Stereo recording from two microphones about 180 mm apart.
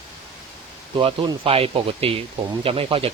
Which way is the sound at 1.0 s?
30° right (ahead or behind).